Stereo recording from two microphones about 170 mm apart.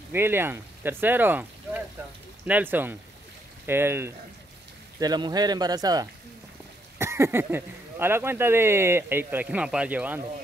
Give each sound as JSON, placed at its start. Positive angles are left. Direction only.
{"t": 0.1, "sound": "speech", "side_deg": -15}
{"t": 5.0, "sound": "speech", "side_deg": -25}